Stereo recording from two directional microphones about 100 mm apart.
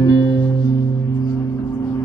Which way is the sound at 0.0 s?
35° left (ahead or behind).